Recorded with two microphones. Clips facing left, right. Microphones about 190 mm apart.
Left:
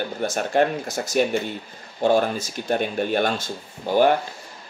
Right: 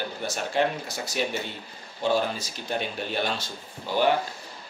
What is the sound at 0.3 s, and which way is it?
Speech, 50° left (ahead or behind).